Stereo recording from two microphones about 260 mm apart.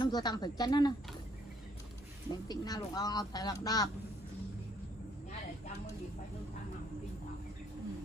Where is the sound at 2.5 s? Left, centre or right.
Centre.